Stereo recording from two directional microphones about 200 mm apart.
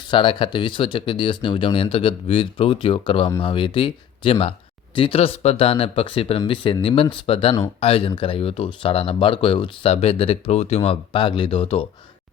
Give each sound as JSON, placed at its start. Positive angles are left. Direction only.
{"t": 0.0, "sound": "speech", "side_deg": 25}